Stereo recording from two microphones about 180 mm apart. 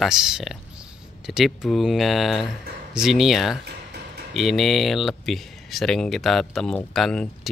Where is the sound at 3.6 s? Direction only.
65° right (ahead or behind).